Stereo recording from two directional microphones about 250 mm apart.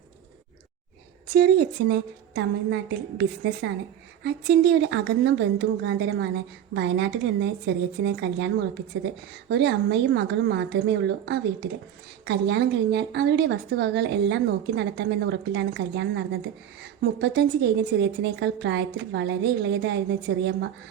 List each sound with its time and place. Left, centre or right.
1.3 s a woman's voice: right